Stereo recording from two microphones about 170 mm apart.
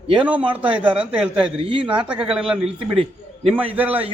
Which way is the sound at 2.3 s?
5° right (ahead or behind).